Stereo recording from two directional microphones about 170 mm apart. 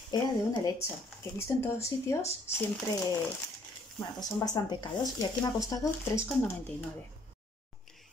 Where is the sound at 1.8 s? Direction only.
15° left (ahead or behind).